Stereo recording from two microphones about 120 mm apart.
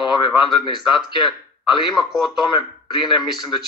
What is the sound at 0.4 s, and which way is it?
Speech, 40° left (ahead or behind).